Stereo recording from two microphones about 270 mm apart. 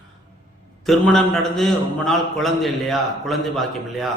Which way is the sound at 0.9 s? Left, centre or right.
Centre.